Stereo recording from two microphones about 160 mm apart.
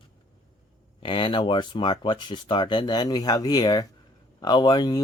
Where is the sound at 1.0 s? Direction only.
30° left (ahead or behind).